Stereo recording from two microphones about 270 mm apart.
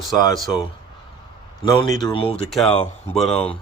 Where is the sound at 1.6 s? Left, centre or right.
Centre.